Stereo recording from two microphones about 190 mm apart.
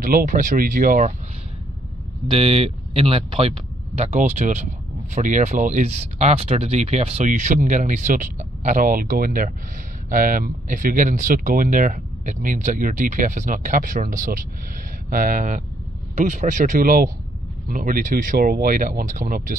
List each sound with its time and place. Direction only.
0.0 s speech: 45° right (ahead or behind)
2.2 s speech: 30° right (ahead or behind); by 19.5 s 50° right (ahead or behind)